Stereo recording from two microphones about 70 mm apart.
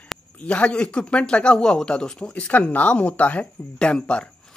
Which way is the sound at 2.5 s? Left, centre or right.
Left.